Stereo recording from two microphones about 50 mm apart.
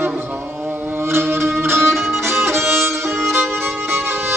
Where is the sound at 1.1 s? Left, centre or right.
Right.